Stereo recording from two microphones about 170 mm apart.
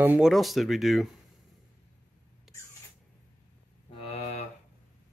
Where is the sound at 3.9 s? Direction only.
35° left (ahead or behind).